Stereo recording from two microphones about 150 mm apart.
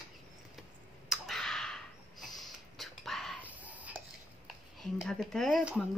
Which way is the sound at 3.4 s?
10° right (ahead or behind).